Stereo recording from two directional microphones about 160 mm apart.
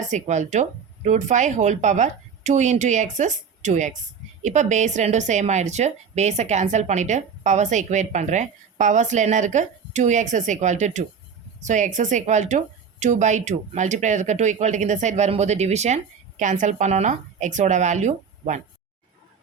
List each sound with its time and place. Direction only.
0.1 s a woman's voice: 50° right (ahead or behind)